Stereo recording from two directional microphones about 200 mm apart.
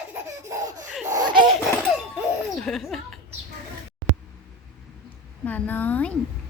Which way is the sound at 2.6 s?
Centre (ahead or behind).